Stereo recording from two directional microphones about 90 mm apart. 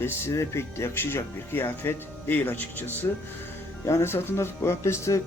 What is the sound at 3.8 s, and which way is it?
A man's voice, 30° left (ahead or behind).